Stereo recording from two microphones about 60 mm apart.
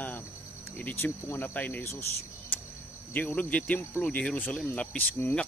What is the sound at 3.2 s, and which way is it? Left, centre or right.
Speech, left.